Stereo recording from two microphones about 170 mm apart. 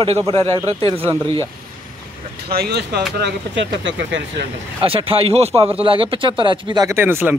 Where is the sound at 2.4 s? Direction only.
65° right (ahead or behind).